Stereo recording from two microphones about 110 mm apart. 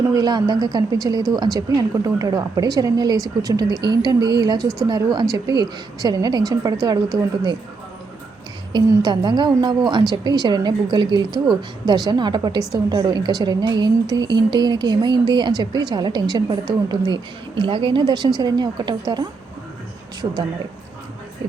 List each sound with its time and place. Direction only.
0.1 s a woman's voice: 40° right (ahead or behind)
8.9 s a woman's voice: 40° right (ahead or behind)